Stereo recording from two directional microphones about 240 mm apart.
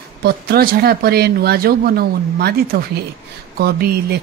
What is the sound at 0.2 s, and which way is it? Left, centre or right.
Speech, right.